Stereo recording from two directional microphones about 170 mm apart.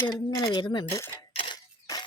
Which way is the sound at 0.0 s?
20° left (ahead or behind).